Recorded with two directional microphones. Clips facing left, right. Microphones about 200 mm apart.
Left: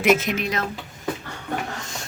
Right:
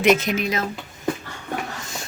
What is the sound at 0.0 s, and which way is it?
Speech, 5° left (ahead or behind).